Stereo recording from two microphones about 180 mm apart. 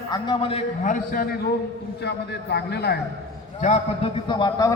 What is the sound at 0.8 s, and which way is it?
Speech, 45° left (ahead or behind).